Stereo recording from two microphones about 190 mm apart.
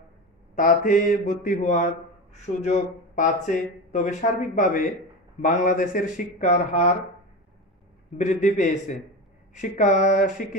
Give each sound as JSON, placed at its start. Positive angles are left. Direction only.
{"t": 0.6, "sound": "speech", "side_deg": 45}
{"t": 8.2, "sound": "speech", "side_deg": 40}